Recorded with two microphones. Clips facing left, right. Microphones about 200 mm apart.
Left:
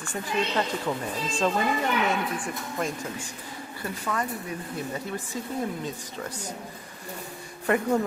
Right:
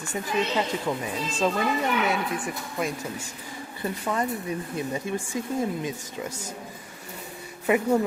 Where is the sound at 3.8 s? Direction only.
20° right (ahead or behind).